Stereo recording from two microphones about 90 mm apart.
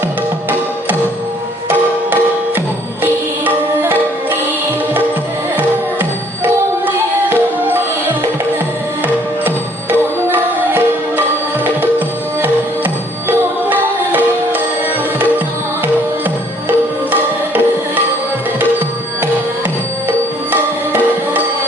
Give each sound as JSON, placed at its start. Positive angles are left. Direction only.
{"t": 3.0, "sound": "music", "side_deg": -20}
{"t": 5.5, "sound": "music", "side_deg": -20}
{"t": 11.6, "sound": "music", "side_deg": -20}
{"t": 16.6, "sound": "music", "side_deg": -20}
{"t": 20.1, "sound": "music", "side_deg": -20}